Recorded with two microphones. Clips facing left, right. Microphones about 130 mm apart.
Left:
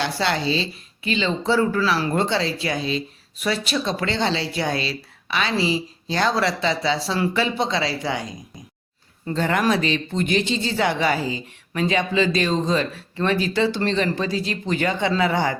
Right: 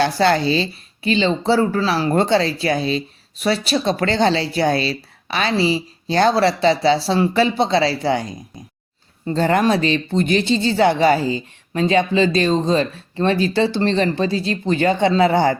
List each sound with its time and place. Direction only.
0.0 s speech: 45° right (ahead or behind)
1.0 s speech: 30° right (ahead or behind)